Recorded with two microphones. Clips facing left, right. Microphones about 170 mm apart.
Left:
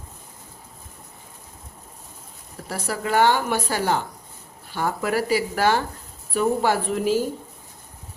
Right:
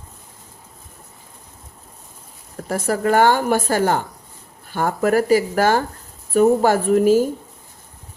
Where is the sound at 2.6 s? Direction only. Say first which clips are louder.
Right 8 dB; 50° right (ahead or behind).